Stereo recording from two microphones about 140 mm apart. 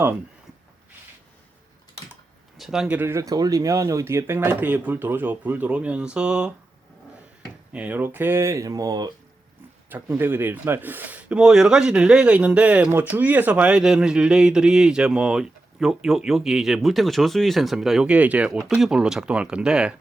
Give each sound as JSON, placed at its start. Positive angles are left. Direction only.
{"t": 2.6, "sound": "speech", "side_deg": -5}
{"t": 7.7, "sound": "speech", "side_deg": -10}
{"t": 9.9, "sound": "speech", "side_deg": -15}